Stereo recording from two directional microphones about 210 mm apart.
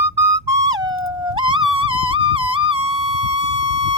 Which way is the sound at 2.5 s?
25° right (ahead or behind).